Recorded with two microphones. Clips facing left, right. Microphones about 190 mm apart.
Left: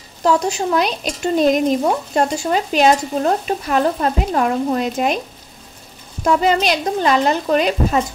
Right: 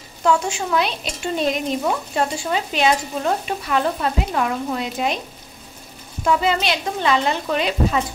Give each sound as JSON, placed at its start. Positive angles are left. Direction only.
{"t": 0.2, "sound": "a woman's voice", "side_deg": 40}
{"t": 6.2, "sound": "speech", "side_deg": 45}